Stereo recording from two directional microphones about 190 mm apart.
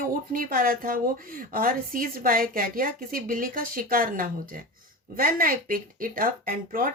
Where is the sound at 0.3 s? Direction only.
50° right (ahead or behind).